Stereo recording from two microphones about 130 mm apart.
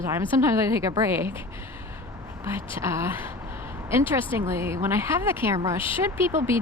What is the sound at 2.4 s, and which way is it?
Speech, 20° right (ahead or behind).